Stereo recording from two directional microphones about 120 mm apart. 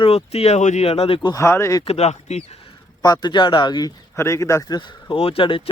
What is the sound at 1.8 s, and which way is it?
Speech, 60° left (ahead or behind).